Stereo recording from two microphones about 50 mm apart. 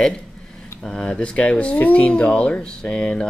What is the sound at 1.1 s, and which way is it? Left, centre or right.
Speech, left.